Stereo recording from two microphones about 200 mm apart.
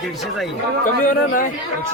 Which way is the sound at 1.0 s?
40° left (ahead or behind).